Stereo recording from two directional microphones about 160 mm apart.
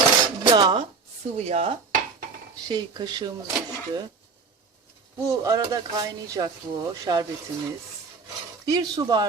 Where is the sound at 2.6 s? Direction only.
25° right (ahead or behind).